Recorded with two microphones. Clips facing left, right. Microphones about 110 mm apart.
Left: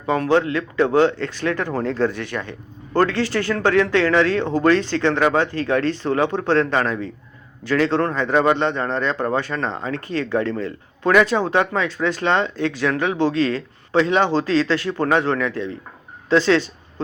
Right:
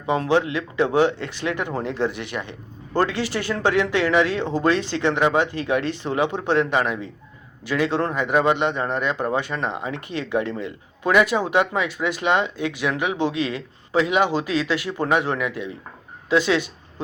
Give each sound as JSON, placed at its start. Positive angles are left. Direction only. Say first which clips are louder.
{"t": 0.0, "sound": "a man's voice", "louder": "left 2 dB", "side_deg": -15}